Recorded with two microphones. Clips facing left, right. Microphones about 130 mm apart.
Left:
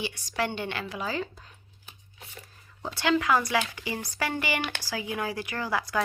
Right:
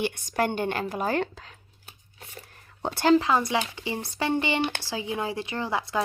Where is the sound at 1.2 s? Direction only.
90° right.